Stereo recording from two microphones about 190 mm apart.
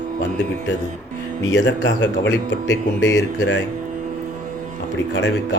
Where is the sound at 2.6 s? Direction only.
15° left (ahead or behind).